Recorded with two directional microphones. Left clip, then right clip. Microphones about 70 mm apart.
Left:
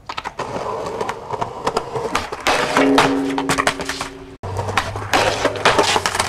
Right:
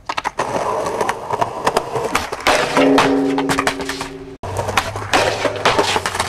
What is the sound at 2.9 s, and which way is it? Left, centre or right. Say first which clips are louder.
Music: right 1 dB; centre.